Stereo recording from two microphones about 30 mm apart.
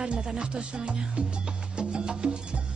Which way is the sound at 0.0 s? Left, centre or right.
Right.